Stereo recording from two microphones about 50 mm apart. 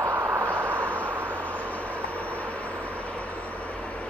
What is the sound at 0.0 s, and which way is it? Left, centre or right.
Vehicle, right.